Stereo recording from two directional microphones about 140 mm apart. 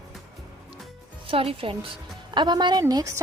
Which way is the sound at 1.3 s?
40° right (ahead or behind).